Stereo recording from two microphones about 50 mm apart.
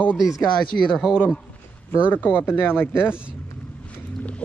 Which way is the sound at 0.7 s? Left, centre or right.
Left.